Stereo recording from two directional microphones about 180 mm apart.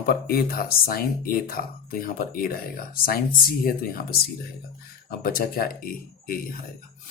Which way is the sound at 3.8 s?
55° left (ahead or behind).